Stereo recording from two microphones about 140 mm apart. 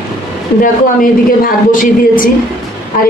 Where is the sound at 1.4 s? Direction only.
80° left.